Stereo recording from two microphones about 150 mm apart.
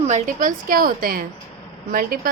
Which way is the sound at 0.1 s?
60° right (ahead or behind).